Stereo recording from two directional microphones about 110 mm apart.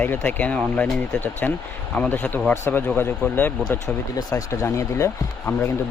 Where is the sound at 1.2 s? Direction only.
15° left (ahead or behind).